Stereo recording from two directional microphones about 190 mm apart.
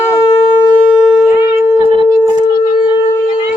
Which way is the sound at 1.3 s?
10° right (ahead or behind).